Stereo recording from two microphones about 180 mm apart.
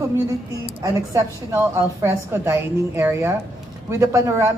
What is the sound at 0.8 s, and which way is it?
A woman's voice, 20° right (ahead or behind).